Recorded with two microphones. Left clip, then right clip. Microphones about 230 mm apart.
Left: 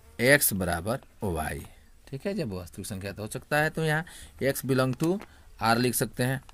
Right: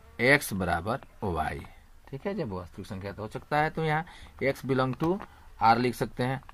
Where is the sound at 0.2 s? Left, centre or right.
Left.